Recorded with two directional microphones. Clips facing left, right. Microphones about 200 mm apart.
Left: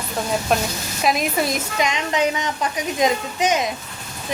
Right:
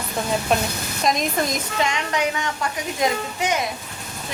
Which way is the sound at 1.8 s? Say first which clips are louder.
Left 2 dB; 20° left (ahead or behind).